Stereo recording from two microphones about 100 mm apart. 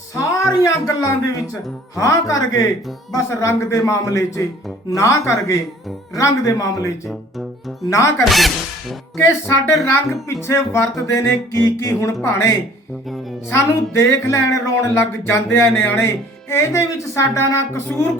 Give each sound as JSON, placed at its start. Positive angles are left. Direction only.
{"t": 0.2, "sound": "a sound", "side_deg": 30}
{"t": 0.6, "sound": "a man's voice", "side_deg": 35}
{"t": 8.2, "sound": "music", "side_deg": 0}
{"t": 9.1, "sound": "speech", "side_deg": 25}